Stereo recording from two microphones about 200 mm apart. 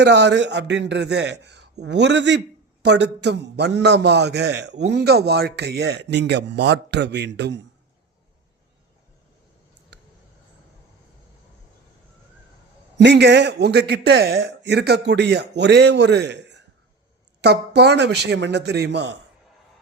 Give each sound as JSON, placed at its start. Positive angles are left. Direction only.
{"t": 0.0, "sound": "a man's voice", "side_deg": -60}
{"t": 13.0, "sound": "a man's voice", "side_deg": -60}